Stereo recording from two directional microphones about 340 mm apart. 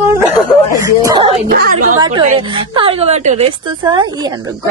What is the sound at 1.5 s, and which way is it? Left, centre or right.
Speech, right.